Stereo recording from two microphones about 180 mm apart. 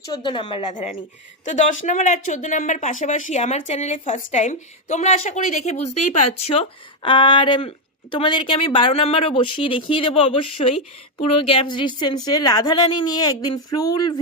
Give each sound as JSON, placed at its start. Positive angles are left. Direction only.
{"t": 0.0, "sound": "speech", "side_deg": 25}
{"t": 0.7, "sound": "a woman's voice", "side_deg": 45}